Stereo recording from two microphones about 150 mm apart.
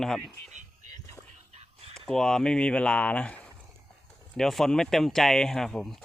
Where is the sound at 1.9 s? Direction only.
Centre (ahead or behind).